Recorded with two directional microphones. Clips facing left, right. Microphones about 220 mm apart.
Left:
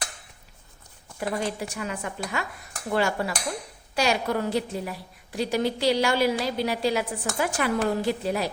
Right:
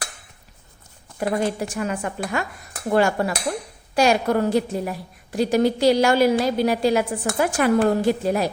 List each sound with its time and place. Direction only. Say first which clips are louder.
1.3 s a woman's voice: right 6 dB; 50° right (ahead or behind)